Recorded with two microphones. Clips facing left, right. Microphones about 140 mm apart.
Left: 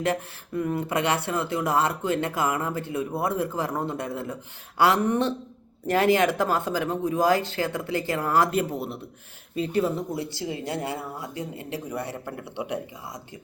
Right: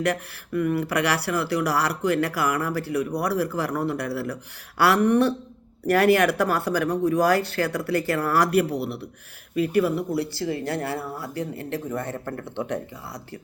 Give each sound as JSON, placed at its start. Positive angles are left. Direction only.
{"t": 0.0, "sound": "speech", "side_deg": 25}
{"t": 8.7, "sound": "speech", "side_deg": -70}
{"t": 9.6, "sound": "speech", "side_deg": 25}